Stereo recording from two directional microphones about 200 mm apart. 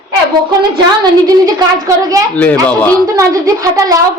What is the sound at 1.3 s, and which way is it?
Speech, 20° right (ahead or behind).